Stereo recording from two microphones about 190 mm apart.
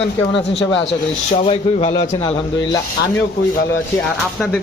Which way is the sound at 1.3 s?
30° left (ahead or behind).